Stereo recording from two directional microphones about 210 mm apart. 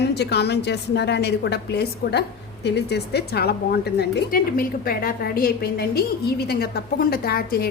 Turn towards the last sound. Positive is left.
turn(degrees=45)  # may be behind; listen again after turning